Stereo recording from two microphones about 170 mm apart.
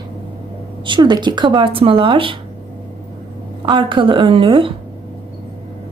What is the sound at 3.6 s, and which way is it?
A woman's voice, 30° right (ahead or behind).